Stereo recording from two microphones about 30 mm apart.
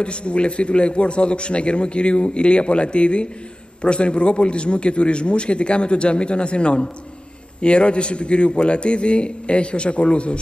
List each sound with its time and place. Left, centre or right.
0.0 s a man's voice: left